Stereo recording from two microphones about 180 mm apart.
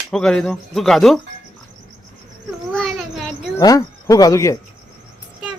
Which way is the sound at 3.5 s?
20° left (ahead or behind).